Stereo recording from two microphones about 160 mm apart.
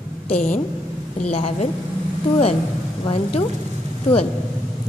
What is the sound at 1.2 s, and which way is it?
Speech, 40° left (ahead or behind).